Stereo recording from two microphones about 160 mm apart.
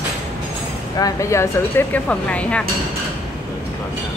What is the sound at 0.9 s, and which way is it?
Speech, 20° left (ahead or behind).